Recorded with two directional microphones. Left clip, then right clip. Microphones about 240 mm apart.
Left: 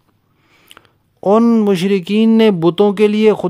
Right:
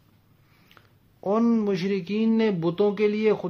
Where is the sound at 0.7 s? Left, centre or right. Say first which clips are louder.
Left 13 dB; left.